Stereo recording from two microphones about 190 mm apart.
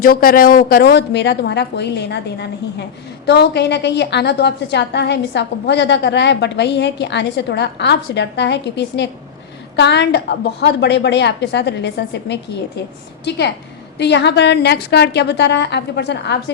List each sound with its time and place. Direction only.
0.0 s a woman's voice: 50° left (ahead or behind)